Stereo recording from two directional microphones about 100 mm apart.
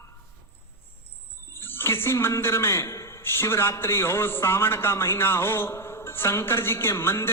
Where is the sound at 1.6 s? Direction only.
25° left (ahead or behind).